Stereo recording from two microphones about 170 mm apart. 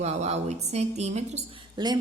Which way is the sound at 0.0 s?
40° right (ahead or behind).